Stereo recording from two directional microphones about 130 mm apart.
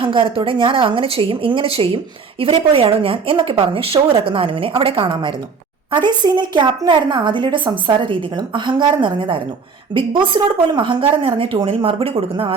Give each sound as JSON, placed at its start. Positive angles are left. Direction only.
{"t": 0.0, "sound": "a woman's voice", "side_deg": -40}